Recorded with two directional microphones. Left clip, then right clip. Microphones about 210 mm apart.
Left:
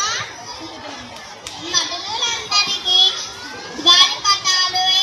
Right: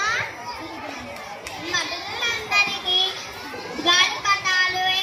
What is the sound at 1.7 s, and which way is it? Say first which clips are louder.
Children playing: left 5 dB; 50° left (ahead or behind).